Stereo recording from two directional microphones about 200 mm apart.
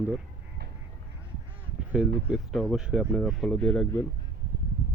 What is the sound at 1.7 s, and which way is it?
Honk, 5° right (ahead or behind).